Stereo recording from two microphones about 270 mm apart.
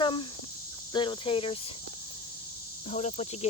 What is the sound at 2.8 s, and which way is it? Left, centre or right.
Speech, left.